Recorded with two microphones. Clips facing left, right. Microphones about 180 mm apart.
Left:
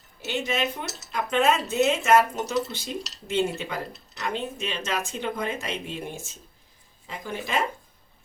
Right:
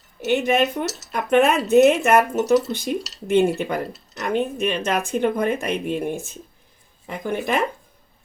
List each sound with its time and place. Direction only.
0.3 s speech: 60° right (ahead or behind)